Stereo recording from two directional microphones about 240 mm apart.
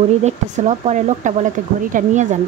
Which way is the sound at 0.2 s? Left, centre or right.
Right.